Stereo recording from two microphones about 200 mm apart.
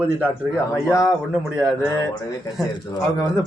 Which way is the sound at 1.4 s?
5° right (ahead or behind).